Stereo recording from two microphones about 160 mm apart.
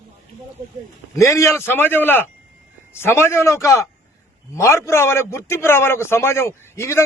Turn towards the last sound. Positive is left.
turn(degrees=15)  # may be behind; listen again after turning